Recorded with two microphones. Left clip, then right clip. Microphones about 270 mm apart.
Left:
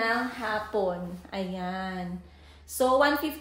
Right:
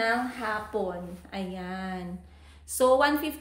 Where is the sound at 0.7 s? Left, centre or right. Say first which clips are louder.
Left 3 dB; centre.